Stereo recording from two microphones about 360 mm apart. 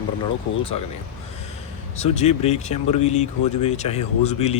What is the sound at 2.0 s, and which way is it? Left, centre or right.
Speech, centre.